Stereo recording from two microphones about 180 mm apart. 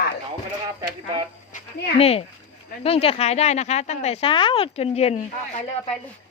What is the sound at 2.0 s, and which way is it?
A woman's voice, 35° left (ahead or behind).